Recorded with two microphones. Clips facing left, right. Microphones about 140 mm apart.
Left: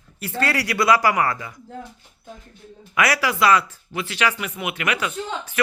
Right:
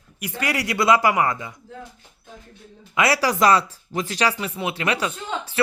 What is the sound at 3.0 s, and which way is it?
Speech, 30° right (ahead or behind).